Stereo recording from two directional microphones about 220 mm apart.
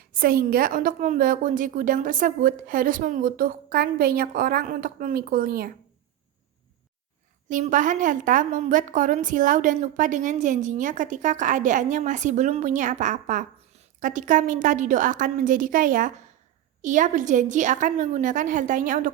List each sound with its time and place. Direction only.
0.1 s a woman's voice: 40° right (ahead or behind)
7.4 s a woman's voice: 35° right (ahead or behind)